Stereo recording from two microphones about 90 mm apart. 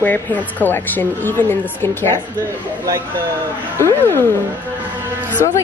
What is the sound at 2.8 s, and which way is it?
Speech, 35° right (ahead or behind).